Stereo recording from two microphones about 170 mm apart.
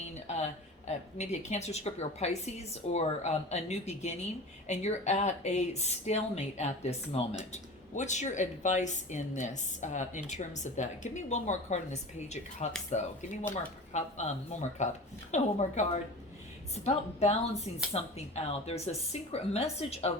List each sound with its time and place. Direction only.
0.3 s a woman's voice: 40° left (ahead or behind)